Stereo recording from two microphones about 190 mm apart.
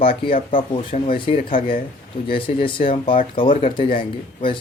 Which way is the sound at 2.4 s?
25° left (ahead or behind).